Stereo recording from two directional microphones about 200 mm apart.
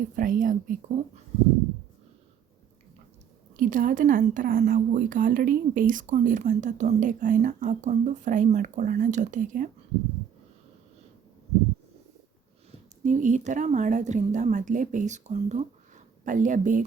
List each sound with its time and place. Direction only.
0.2 s a woman's voice: 40° right (ahead or behind)
3.6 s a woman's voice: 40° right (ahead or behind)
13.0 s a woman's voice: 40° right (ahead or behind)